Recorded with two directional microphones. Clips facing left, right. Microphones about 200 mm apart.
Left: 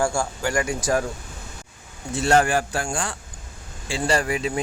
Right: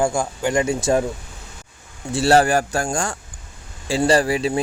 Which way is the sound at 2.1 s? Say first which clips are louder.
Right 4 dB; 35° right (ahead or behind).